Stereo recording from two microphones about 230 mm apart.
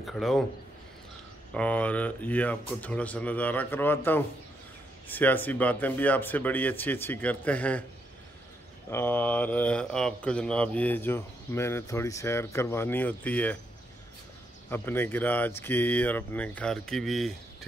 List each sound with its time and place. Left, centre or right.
0.0 s a man's voice: centre
1.5 s speech: centre
8.9 s speech: centre
14.7 s speech: centre